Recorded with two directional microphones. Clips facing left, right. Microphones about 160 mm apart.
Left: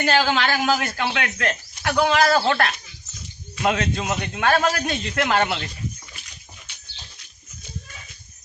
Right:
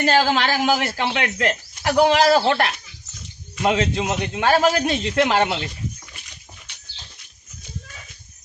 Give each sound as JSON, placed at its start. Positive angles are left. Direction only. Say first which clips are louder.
{"t": 0.0, "sound": "a man's voice", "louder": "right 2 dB", "side_deg": -35}